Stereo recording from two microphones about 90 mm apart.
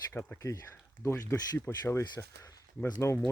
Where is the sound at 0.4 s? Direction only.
30° left (ahead or behind).